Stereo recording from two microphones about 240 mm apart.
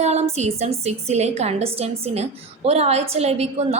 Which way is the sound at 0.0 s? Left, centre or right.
Right.